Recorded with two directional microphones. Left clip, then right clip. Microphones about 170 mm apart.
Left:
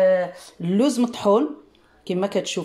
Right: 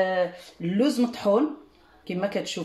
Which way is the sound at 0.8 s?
40° left (ahead or behind).